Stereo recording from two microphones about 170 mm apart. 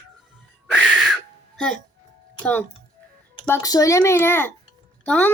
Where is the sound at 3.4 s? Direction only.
15° left (ahead or behind).